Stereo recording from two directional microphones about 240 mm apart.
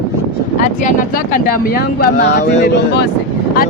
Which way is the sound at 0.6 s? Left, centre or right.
Left.